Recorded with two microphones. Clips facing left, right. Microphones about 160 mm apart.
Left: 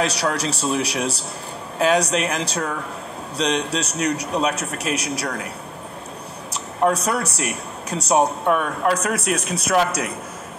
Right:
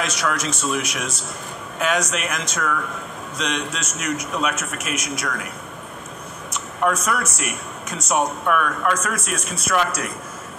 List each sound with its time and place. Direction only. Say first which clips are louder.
0.0 s speech: left 2 dB; 35° left (ahead or behind)
6.5 s speech: left 2 dB; 35° left (ahead or behind)